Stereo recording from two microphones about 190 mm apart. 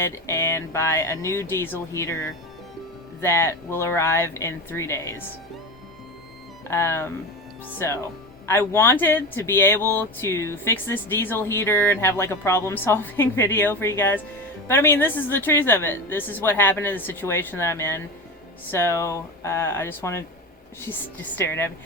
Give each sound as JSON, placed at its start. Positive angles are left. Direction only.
{"t": 0.0, "sound": "speech", "side_deg": 15}
{"t": 6.7, "sound": "speech", "side_deg": 15}